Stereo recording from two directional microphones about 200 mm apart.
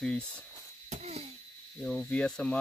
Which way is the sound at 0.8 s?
35° right (ahead or behind).